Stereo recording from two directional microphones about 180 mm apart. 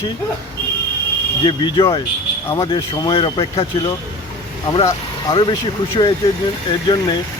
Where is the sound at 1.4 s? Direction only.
25° left (ahead or behind).